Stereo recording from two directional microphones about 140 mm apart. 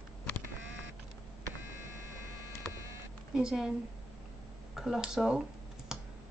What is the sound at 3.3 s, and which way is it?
Speech, 5° right (ahead or behind).